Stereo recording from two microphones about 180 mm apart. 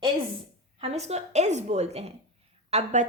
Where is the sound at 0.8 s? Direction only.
35° right (ahead or behind).